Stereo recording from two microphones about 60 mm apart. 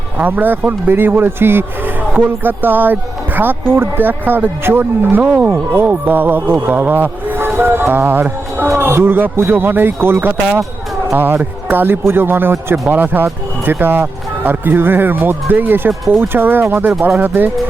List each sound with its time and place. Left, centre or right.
0.2 s speech: right